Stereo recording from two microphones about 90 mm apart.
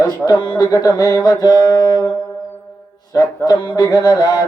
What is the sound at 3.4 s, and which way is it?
Speech, 60° left (ahead or behind).